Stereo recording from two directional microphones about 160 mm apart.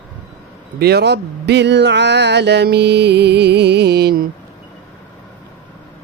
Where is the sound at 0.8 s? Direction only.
90° right.